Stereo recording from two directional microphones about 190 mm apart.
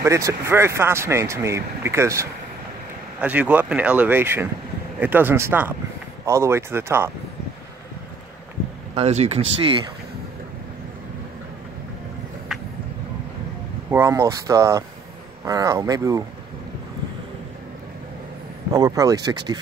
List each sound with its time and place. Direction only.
0.0 s speech: 15° right (ahead or behind)
8.9 s speech: 35° right (ahead or behind)
13.8 s speech: 15° right (ahead or behind)
18.7 s speech: 20° right (ahead or behind)